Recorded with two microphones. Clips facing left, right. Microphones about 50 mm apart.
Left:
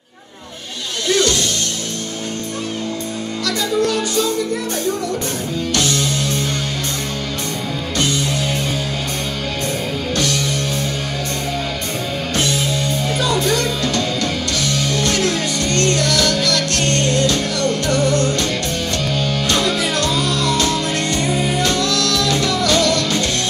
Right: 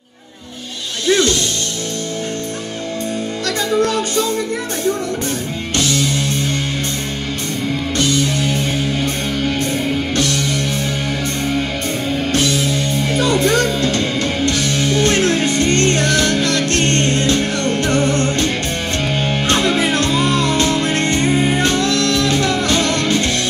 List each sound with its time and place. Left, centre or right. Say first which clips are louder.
1.0 s music: right 2 dB; right
5.9 s music: right 1 dB; right
10.1 s music: right 2 dB; right
13.2 s music: right 4 dB; right